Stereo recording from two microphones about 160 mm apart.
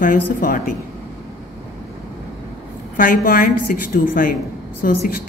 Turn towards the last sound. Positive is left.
turn(degrees=70)  # may be behind; listen again after turning